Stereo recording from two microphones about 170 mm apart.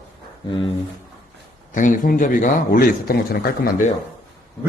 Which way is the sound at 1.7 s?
50° left (ahead or behind).